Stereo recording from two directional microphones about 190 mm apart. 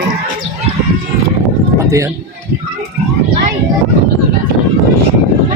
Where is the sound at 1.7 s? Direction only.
15° right (ahead or behind).